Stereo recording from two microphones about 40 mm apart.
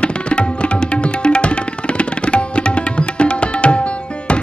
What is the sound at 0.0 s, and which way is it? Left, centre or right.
Tabla, left.